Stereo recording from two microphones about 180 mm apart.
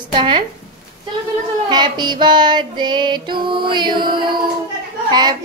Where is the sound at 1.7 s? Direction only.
25° right (ahead or behind).